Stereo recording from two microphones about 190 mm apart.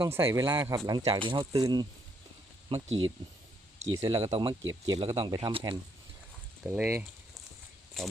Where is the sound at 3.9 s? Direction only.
20° right (ahead or behind).